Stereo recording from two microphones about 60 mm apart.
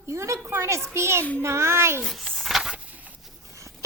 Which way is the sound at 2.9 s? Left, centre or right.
Right.